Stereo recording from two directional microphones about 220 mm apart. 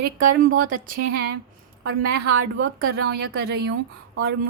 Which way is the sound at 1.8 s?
60° right (ahead or behind).